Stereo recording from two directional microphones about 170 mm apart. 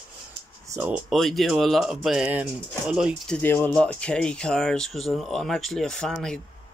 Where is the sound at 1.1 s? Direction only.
Centre (ahead or behind).